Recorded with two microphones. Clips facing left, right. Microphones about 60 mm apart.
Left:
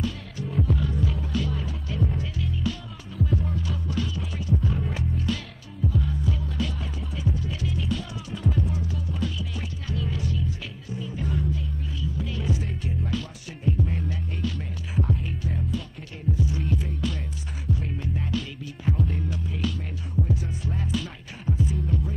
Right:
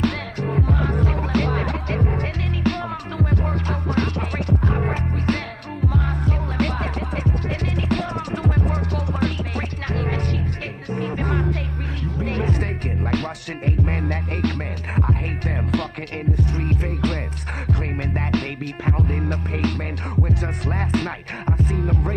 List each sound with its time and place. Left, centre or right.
0.0 s music: right